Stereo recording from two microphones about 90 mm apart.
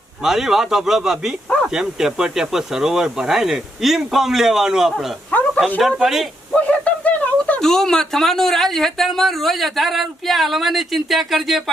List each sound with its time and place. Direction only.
0.2 s speech: 5° right (ahead or behind)
5.5 s speech: 15° left (ahead or behind)
6.0 s speech: 5° right (ahead or behind)
6.5 s a sound: 15° left (ahead or behind)
7.6 s speech: 5° left (ahead or behind)